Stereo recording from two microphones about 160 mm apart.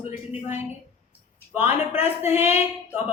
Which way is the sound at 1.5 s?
15° right (ahead or behind).